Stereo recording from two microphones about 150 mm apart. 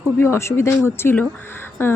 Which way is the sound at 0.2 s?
15° left (ahead or behind).